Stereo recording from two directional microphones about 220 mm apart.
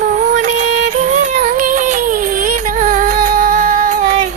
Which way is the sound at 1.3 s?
35° right (ahead or behind).